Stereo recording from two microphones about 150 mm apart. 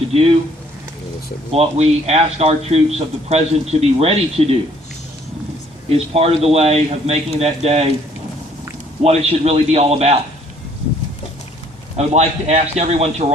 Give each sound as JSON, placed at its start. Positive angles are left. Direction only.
{"t": 0.1, "sound": "speech", "side_deg": -40}
{"t": 1.5, "sound": "speech", "side_deg": -45}
{"t": 5.9, "sound": "speech", "side_deg": -40}
{"t": 9.0, "sound": "speech", "side_deg": -45}
{"t": 11.9, "sound": "speech", "side_deg": -45}